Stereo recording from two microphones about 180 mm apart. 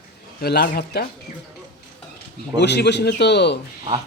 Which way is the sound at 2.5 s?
70° left (ahead or behind).